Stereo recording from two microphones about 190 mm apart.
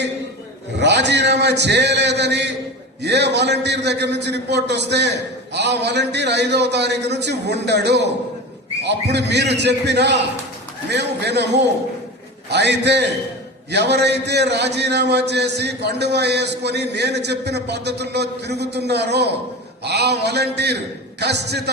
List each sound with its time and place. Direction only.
0.8 s a man's voice: 65° right (ahead or behind)